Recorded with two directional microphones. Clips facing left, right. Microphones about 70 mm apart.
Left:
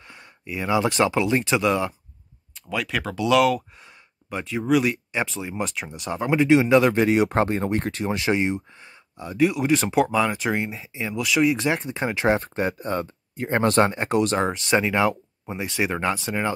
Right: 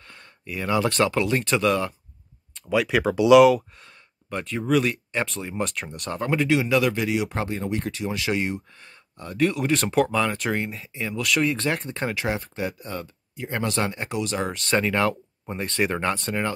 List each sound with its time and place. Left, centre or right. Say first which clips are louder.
0.0 s a sound: left 2 dB; centre
0.5 s speech: left 1 dB; centre
2.5 s speech: right 5 dB; centre
3.8 s speech: left 1 dB; centre
6.5 s speech: left 6 dB; left
8.2 s speech: left 4 dB; left
12.4 s speech: left 4 dB; left
14.5 s speech: left 2 dB; centre